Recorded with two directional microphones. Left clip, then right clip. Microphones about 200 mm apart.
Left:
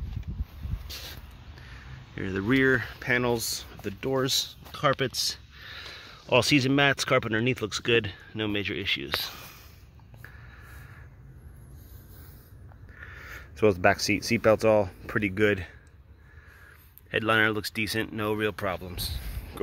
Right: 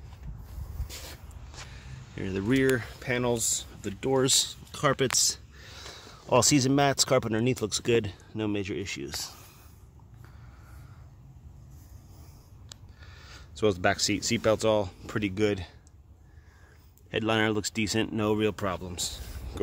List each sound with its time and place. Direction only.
2.1 s speech: 5° right (ahead or behind)
13.3 s speech: centre (ahead or behind)
17.1 s speech: 10° right (ahead or behind)